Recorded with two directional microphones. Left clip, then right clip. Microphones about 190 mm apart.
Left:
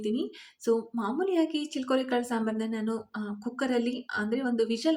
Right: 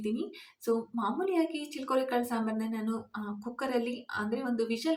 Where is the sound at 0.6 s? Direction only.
20° left (ahead or behind).